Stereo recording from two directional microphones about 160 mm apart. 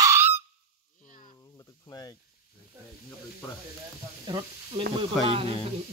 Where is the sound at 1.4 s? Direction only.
20° left (ahead or behind).